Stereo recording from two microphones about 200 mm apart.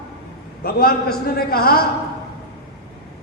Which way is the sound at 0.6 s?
50° left (ahead or behind).